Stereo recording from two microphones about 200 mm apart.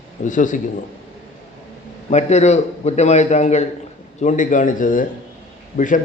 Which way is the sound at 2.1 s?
35° left (ahead or behind).